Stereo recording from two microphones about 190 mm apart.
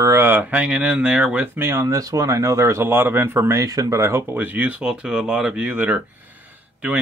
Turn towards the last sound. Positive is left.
turn(degrees=-10)  # may be behind; listen again after turning